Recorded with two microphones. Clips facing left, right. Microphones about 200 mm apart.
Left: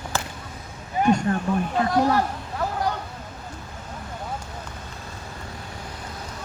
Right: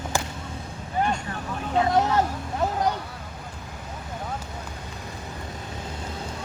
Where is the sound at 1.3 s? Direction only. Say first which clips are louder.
Left 10 dB; 50° left (ahead or behind).